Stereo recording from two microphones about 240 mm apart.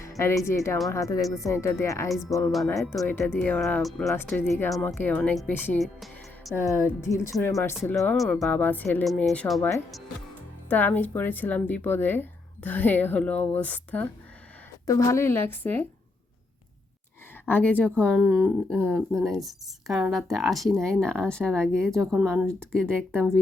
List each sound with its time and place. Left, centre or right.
0.2 s speech: centre
2.5 s speech: centre
6.6 s speech: centre
17.5 s speech: centre
21.9 s speech: centre
23.1 s speech: centre